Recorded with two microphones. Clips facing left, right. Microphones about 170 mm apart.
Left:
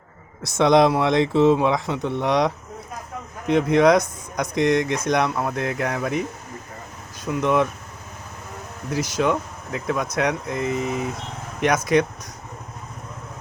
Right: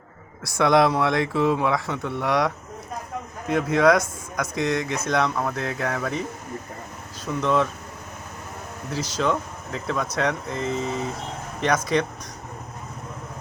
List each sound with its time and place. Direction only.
0.4 s speech: 20° left (ahead or behind)
7.3 s speech: 15° left (ahead or behind)
8.9 s speech: 10° left (ahead or behind)